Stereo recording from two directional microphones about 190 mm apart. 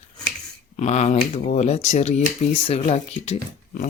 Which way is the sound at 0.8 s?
35° left (ahead or behind).